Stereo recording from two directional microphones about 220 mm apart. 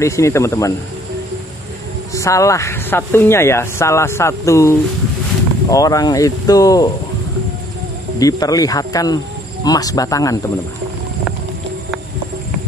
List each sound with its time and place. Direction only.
0.0 s speech: 15° left (ahead or behind)
2.1 s speech: 15° left (ahead or behind)
8.2 s speech: 15° left (ahead or behind)